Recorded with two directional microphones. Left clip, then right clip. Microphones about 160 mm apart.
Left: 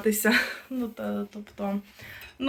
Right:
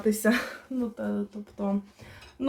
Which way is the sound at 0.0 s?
10° right (ahead or behind).